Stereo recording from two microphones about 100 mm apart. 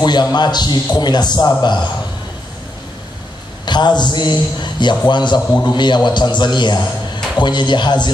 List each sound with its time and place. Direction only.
0.0 s a man's voice: 45° left (ahead or behind)
3.6 s a man's voice: 45° left (ahead or behind)